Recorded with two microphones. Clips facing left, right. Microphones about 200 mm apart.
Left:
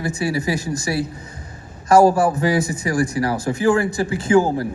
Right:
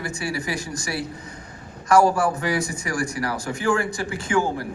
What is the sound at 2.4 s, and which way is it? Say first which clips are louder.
Speech: left 6 dB; 20° left (ahead or behind).